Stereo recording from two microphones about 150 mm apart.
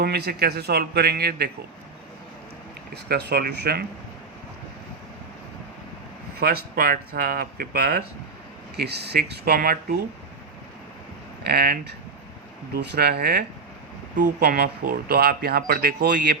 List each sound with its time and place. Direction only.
0.0 s speech: 90° right
2.9 s speech: 90° right
6.4 s speech: 80° right
11.4 s speech: 90° right